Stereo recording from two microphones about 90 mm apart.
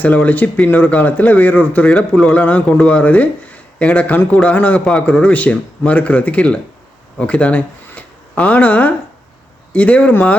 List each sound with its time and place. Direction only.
0.0 s speech: 15° left (ahead or behind)